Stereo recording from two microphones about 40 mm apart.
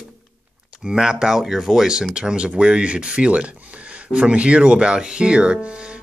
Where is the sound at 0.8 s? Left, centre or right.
Centre.